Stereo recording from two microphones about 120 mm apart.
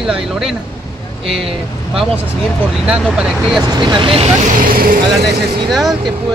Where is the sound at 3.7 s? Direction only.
45° right (ahead or behind).